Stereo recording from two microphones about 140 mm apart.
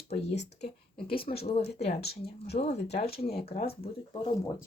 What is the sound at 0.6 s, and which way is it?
Speech, 40° left (ahead or behind).